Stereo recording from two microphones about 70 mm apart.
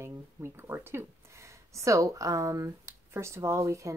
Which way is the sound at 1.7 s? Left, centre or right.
Right.